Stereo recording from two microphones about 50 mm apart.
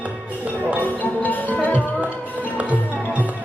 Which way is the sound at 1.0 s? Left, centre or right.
Left.